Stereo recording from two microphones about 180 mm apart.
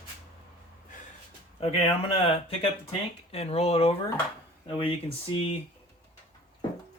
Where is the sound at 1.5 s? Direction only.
35° left (ahead or behind).